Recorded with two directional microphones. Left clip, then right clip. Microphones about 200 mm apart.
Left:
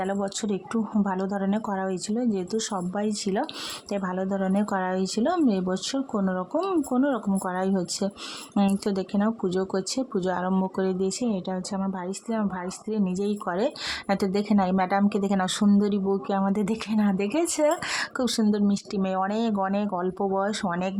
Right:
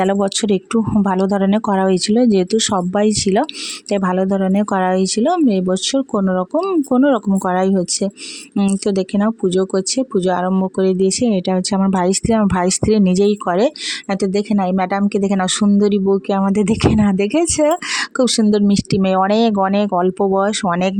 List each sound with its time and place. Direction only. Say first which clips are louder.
0.0 s speech: right 12 dB; 45° right (ahead or behind)